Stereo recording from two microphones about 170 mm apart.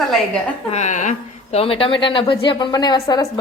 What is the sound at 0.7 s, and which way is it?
Speech, 45° left (ahead or behind).